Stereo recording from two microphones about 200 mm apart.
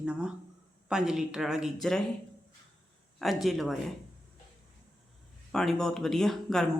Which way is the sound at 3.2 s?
Centre (ahead or behind).